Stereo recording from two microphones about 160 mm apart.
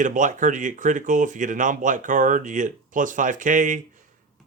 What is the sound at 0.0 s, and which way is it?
Speech, 50° right (ahead or behind).